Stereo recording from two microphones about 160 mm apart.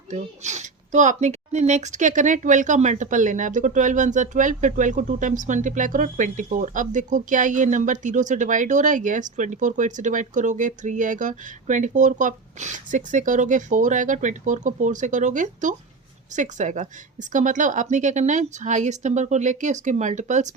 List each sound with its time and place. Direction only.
0.1 s speech: 50° right (ahead or behind)